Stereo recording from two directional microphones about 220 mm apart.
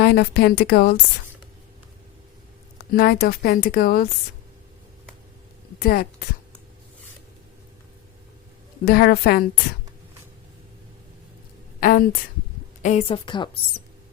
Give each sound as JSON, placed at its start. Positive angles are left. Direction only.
{"t": 0.0, "sound": "speech", "side_deg": 45}
{"t": 2.9, "sound": "speech", "side_deg": 45}
{"t": 5.8, "sound": "speech", "side_deg": 45}
{"t": 8.8, "sound": "speech", "side_deg": 45}
{"t": 11.8, "sound": "a woman's voice", "side_deg": 40}
{"t": 12.8, "sound": "a woman's voice", "side_deg": 30}